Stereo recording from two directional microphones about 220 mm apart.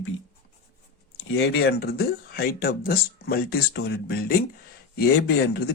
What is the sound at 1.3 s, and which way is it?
Speech, 50° left (ahead or behind).